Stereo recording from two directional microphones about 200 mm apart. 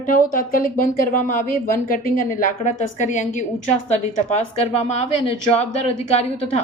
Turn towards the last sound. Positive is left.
turn(degrees=30)  # may be behind; listen again after turning